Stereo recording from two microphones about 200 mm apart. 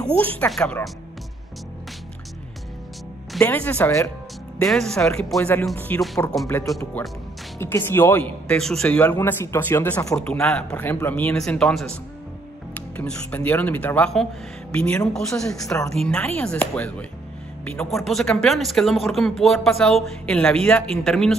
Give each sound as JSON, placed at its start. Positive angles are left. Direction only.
{"t": 0.4, "sound": "speech", "side_deg": 5}
{"t": 3.3, "sound": "speech", "side_deg": 5}